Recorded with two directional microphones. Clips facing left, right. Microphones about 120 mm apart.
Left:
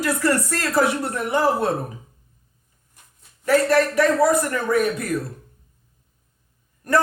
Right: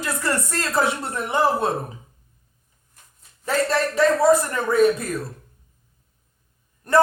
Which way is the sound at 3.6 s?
25° right (ahead or behind).